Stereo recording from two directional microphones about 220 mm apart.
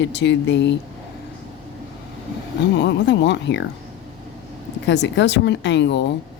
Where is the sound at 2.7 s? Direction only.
50° left (ahead or behind).